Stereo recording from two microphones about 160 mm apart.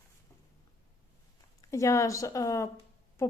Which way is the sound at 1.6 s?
20° left (ahead or behind).